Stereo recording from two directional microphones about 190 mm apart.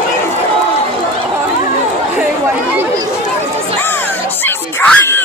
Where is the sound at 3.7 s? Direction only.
10° left (ahead or behind).